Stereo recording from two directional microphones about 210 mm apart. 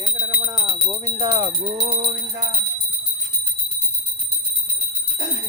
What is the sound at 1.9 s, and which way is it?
Music, 25° right (ahead or behind).